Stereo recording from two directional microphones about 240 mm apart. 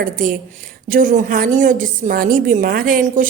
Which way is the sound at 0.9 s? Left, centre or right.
Right.